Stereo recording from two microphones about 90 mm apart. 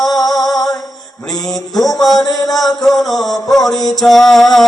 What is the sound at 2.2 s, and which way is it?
Music, 40° left (ahead or behind).